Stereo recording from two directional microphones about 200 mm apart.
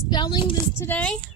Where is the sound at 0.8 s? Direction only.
10° left (ahead or behind).